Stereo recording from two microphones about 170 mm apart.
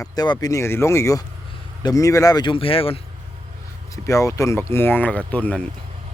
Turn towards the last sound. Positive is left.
turn(degrees=10)  # may be behind; listen again after turning